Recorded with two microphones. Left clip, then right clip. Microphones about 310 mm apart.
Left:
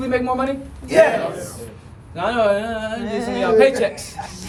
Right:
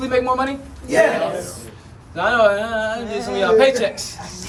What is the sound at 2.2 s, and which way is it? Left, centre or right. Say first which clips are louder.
A man's voice: right 3 dB; centre.